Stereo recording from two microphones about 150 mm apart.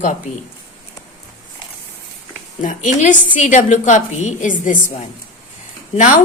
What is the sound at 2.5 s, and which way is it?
A woman's voice, 60° left (ahead or behind).